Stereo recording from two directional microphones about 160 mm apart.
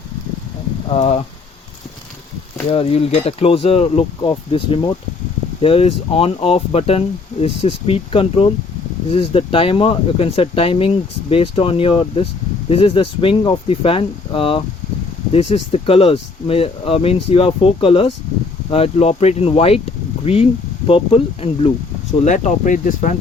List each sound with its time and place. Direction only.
0.9 s speech: 45° left (ahead or behind)
2.6 s speech: 40° left (ahead or behind)
22.2 s speech: 50° left (ahead or behind)